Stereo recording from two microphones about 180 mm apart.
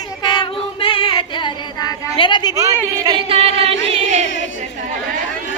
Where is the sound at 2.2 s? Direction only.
25° left (ahead or behind).